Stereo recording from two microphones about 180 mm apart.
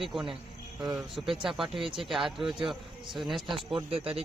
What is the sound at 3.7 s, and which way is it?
Speech, 30° right (ahead or behind).